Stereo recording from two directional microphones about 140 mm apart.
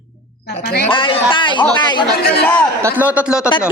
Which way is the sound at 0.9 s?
40° left (ahead or behind).